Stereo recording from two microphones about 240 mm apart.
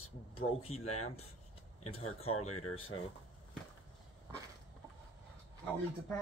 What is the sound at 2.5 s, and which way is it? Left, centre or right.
Speech, left.